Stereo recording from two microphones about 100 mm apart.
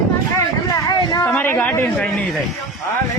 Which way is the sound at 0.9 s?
45° left (ahead or behind).